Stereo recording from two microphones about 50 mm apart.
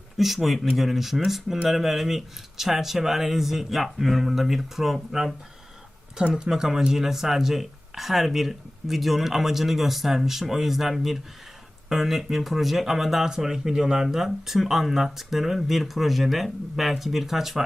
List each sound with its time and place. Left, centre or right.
0.2 s speech: centre
6.3 s speech: centre